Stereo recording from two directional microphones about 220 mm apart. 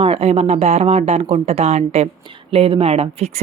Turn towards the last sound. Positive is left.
turn(degrees=-30)  # may be behind; listen again after turning